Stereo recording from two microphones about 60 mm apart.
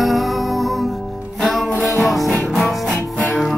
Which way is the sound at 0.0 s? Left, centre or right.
Centre.